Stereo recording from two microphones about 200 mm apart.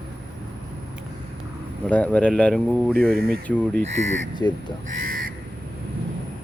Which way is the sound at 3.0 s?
50° right (ahead or behind).